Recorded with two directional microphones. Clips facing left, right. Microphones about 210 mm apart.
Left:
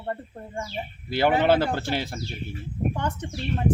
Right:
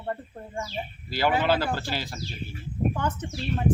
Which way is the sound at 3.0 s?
15° left (ahead or behind).